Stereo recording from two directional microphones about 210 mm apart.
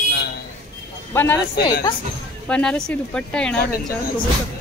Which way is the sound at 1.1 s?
10° left (ahead or behind).